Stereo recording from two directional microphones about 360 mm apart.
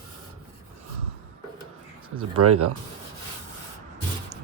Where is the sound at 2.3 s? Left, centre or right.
Right.